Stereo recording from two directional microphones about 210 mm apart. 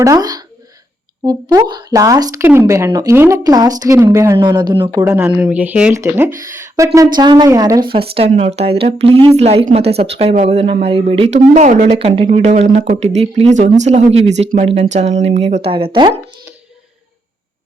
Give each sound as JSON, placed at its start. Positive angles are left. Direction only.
{"t": 0.0, "sound": "a woman's voice", "side_deg": -15}
{"t": 11.9, "sound": "speech", "side_deg": -25}